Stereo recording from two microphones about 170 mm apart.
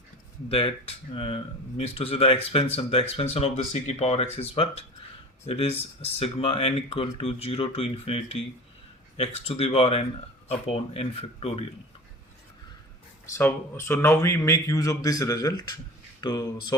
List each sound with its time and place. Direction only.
0.4 s speech: 35° left (ahead or behind)
13.2 s speech: 15° left (ahead or behind)